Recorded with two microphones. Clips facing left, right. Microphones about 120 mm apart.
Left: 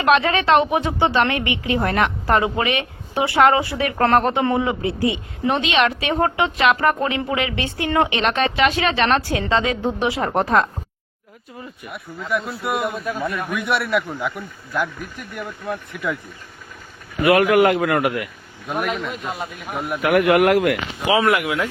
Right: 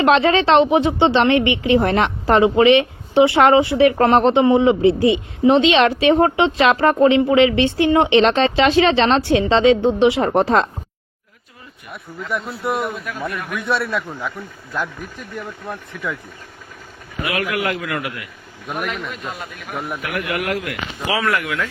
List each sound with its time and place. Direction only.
0.0 s speech: 30° right (ahead or behind)
12.3 s a man's voice: centre (ahead or behind)
13.4 s a man's voice: 15° left (ahead or behind)
17.2 s a man's voice: 50° left (ahead or behind)
20.1 s speech: 55° left (ahead or behind)
21.1 s speech: 20° left (ahead or behind)